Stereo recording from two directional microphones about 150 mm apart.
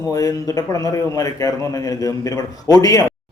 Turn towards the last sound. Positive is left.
turn(degrees=25)  # may be behind; listen again after turning